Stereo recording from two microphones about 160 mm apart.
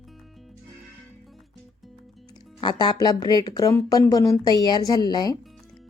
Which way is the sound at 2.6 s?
25° left (ahead or behind).